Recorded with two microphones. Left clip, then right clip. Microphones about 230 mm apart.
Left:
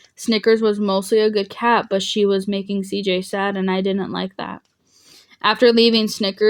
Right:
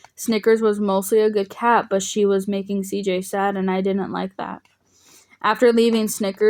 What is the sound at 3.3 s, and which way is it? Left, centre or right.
Speech, left.